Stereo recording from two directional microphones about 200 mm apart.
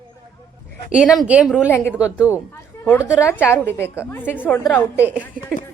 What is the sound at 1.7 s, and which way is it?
Speech, 10° left (ahead or behind).